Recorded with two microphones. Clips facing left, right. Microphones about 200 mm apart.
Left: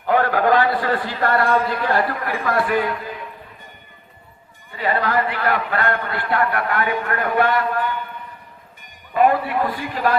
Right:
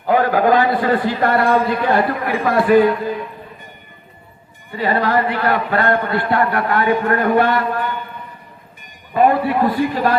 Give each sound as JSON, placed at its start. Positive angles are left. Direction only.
{"t": 0.1, "sound": "a man's voice", "side_deg": -10}
{"t": 4.7, "sound": "a man's voice", "side_deg": -35}
{"t": 9.1, "sound": "a man's voice", "side_deg": -30}